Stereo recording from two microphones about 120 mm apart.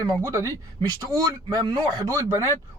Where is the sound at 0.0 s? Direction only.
30° right (ahead or behind).